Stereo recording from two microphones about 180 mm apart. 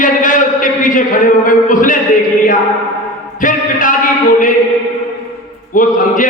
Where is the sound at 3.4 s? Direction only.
45° left (ahead or behind).